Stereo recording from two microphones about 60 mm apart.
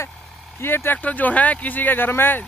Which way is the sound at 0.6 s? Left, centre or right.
Left.